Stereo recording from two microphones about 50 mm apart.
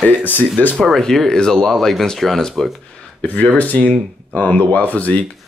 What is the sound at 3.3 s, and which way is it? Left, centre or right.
Speech, left.